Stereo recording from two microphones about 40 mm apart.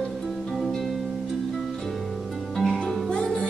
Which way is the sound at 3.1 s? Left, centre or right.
Left.